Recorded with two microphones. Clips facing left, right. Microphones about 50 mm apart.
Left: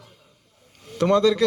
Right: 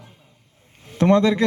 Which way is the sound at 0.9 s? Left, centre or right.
Right.